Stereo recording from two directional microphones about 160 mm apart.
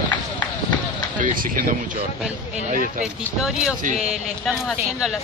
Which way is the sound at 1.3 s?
60° right (ahead or behind).